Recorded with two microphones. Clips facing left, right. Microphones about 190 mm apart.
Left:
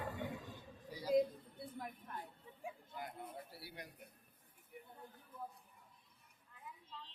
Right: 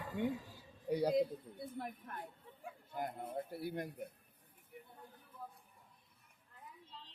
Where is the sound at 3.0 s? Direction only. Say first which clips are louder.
Right 11 dB; 50° right (ahead or behind).